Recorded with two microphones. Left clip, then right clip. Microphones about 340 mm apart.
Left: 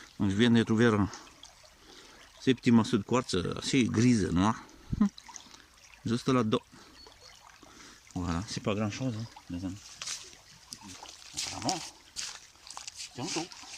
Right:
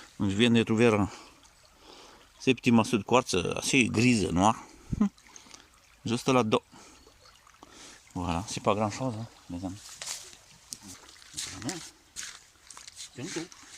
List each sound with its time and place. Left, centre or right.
0.2 s speech: centre
2.4 s speech: centre
7.8 s speech: centre
10.0 s a sound: centre
11.0 s a sound: centre
12.2 s walk: centre
13.2 s speech: centre